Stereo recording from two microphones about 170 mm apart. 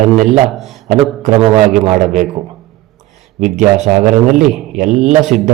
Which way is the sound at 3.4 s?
45° right (ahead or behind).